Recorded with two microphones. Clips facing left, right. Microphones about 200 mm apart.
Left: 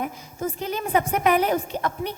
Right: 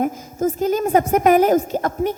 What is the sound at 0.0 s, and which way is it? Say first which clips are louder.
A woman's voice: right 8 dB; 45° right (ahead or behind).